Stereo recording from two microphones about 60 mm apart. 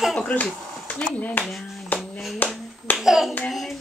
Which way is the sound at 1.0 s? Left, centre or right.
Left.